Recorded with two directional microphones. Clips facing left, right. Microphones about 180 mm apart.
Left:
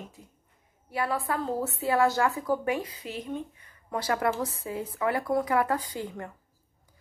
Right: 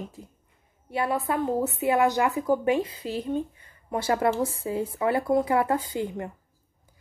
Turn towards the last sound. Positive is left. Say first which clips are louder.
# right 5 dB
turn(degrees=-25)  # may be behind; listen again after turning